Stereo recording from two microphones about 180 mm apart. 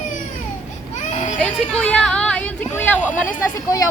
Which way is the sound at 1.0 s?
40° left (ahead or behind).